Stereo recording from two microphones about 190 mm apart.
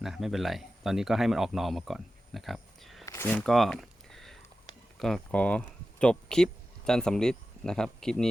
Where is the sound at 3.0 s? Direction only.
15° left (ahead or behind).